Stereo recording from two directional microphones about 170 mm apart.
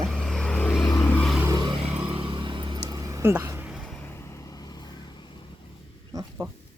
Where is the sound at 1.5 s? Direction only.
25° right (ahead or behind).